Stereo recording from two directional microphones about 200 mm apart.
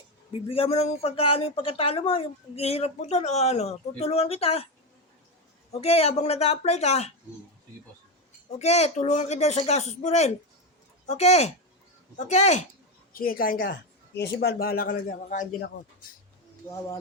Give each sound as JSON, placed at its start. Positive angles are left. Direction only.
{"t": 0.4, "sound": "speech", "side_deg": 30}
{"t": 5.7, "sound": "speech", "side_deg": 30}
{"t": 8.5, "sound": "speech", "side_deg": 35}
{"t": 13.1, "sound": "a man's voice", "side_deg": 45}